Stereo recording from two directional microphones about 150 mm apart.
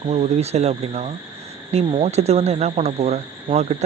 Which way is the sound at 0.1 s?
45° right (ahead or behind).